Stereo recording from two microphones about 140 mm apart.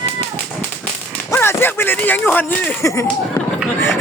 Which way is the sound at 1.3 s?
15° left (ahead or behind).